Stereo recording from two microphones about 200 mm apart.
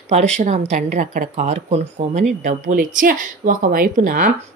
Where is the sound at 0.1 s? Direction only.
35° right (ahead or behind).